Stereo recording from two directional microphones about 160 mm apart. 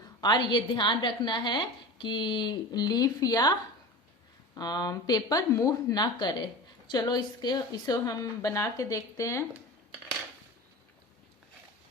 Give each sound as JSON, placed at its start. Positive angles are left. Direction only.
{"t": 0.2, "sound": "a woman's voice", "side_deg": 25}